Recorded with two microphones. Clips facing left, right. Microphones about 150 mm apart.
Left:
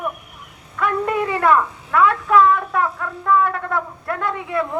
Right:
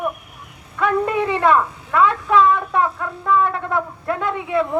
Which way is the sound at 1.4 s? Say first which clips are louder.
Left 1 dB; 20° right (ahead or behind).